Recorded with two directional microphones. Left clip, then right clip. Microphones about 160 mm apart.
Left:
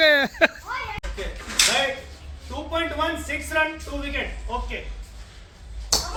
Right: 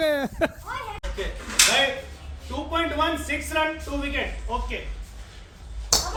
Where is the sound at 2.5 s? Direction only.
Centre (ahead or behind).